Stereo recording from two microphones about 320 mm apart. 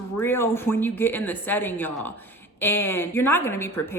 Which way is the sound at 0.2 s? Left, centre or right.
Centre.